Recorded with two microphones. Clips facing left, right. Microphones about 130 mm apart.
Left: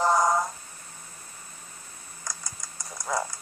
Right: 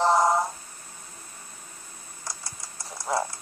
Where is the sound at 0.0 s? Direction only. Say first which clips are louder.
Right 2 dB; 30° right (ahead or behind).